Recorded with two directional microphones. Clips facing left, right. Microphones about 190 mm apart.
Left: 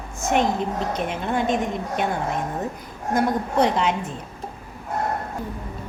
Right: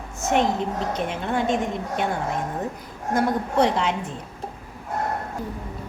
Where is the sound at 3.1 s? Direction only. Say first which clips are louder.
Even; 20° left (ahead or behind).